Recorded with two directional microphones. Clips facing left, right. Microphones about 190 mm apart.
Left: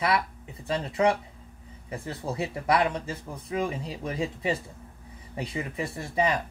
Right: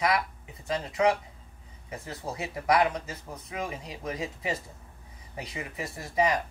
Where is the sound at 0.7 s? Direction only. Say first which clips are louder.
Left 1 dB; 30° left (ahead or behind).